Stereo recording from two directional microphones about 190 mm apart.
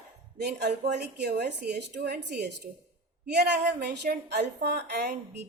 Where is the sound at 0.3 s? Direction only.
60° right (ahead or behind).